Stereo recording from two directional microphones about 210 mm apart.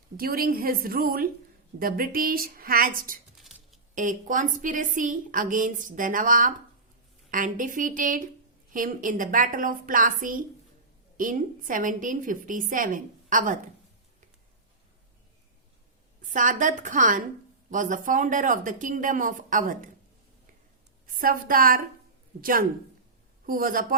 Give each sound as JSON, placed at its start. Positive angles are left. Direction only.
{"t": 0.2, "sound": "a woman's voice", "side_deg": -45}
{"t": 3.3, "sound": "a sound", "side_deg": 0}
{"t": 3.9, "sound": "a woman's voice", "side_deg": -40}
{"t": 16.3, "sound": "a woman's voice", "side_deg": -40}
{"t": 21.2, "sound": "a woman's voice", "side_deg": -45}